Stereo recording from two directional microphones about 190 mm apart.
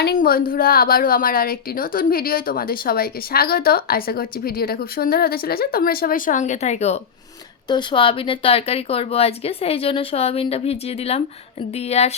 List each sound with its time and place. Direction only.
0.0 s a woman's voice: 50° left (ahead or behind); by 7.0 s 35° left (ahead or behind)
7.7 s speech: 25° left (ahead or behind)